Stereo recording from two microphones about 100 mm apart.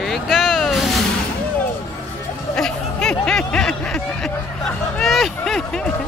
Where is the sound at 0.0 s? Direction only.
Centre (ahead or behind).